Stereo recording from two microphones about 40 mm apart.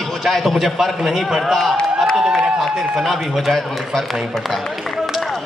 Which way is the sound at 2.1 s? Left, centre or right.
Centre.